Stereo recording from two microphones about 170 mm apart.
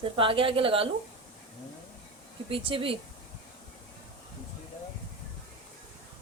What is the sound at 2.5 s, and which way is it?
Speech, 30° right (ahead or behind).